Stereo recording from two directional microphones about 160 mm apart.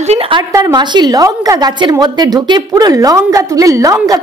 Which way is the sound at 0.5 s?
25° right (ahead or behind).